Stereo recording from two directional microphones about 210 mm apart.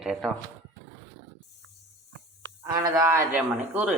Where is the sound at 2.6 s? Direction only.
15° right (ahead or behind).